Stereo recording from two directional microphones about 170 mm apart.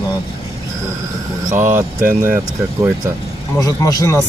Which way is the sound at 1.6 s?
10° right (ahead or behind).